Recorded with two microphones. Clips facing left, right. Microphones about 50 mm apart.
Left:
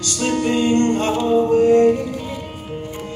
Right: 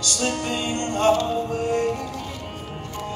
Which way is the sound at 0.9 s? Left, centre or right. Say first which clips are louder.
Left 3 dB; left.